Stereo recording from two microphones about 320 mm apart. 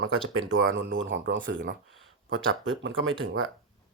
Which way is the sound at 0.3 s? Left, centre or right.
Right.